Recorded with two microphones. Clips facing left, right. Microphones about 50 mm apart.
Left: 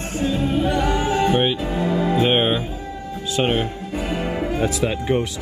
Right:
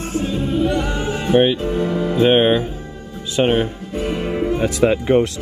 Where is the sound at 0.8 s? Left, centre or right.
Left.